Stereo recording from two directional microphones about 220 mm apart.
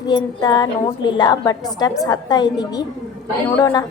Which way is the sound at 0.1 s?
20° left (ahead or behind).